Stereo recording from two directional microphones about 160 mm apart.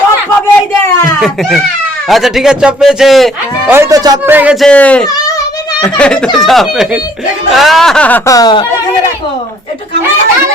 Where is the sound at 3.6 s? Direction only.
15° right (ahead or behind).